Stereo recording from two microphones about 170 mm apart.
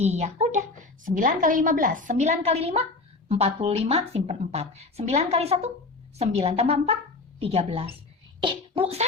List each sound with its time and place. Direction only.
0.0 s a woman's voice: 40° right (ahead or behind)